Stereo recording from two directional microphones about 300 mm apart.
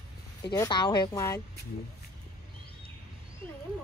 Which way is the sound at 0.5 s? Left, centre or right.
Centre.